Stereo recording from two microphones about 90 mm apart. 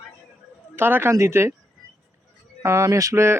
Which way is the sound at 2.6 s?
35° right (ahead or behind).